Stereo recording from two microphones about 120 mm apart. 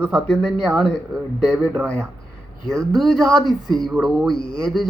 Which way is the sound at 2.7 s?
Centre (ahead or behind).